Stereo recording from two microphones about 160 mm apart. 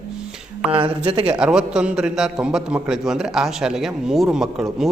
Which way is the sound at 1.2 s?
10° right (ahead or behind).